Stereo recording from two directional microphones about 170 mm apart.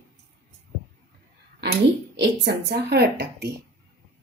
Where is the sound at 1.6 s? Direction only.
85° right.